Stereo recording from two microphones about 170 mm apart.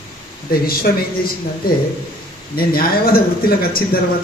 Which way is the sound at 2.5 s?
60° left (ahead or behind).